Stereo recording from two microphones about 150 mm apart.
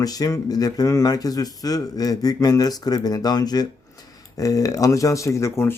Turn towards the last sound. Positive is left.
turn(degrees=15)  # may be behind; listen again after turning